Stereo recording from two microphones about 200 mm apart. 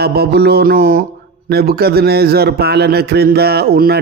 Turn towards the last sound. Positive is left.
turn(degrees=-50)  # may be behind; listen again after turning